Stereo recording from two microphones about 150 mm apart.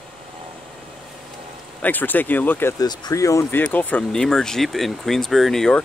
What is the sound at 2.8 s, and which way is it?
Speech, 25° left (ahead or behind).